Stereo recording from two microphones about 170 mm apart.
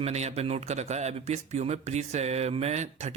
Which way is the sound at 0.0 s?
40° right (ahead or behind).